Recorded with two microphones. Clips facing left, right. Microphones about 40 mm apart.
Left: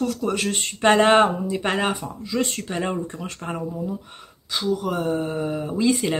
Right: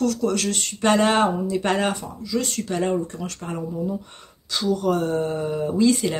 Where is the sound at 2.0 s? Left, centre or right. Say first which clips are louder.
Left 1 dB; left.